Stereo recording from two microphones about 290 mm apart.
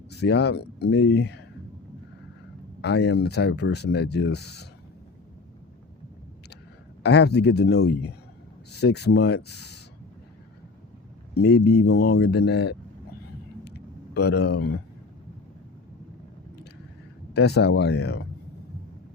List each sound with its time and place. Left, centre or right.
0.1 s speech: left
2.8 s speech: left
7.0 s speech: left
11.3 s speech: left
13.7 s a sound: left
17.3 s speech: left